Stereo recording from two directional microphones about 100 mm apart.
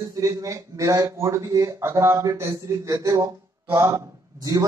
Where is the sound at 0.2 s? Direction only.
35° right (ahead or behind).